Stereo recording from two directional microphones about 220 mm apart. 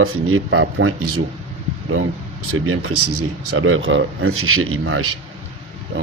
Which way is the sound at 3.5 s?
65° right (ahead or behind).